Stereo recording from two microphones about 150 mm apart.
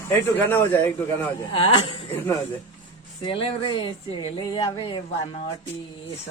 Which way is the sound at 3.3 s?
35° left (ahead or behind).